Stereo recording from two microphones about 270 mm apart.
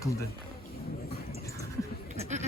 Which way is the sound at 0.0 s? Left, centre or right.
Centre.